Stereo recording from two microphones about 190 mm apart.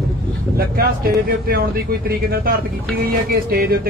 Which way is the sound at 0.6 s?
50° right (ahead or behind).